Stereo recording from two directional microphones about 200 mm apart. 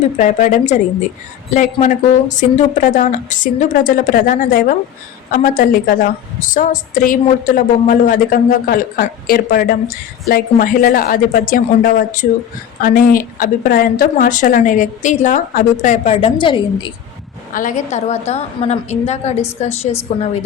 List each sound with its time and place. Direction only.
0.2 s a woman's voice: 40° left (ahead or behind); by 16.9 s 25° left (ahead or behind)
17.5 s a woman's voice: 40° left (ahead or behind)